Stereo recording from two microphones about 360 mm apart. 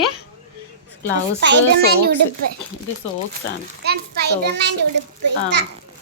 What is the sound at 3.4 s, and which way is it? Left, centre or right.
Speech, left.